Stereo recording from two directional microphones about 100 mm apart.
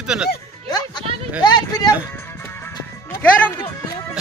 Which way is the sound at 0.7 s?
45° left (ahead or behind).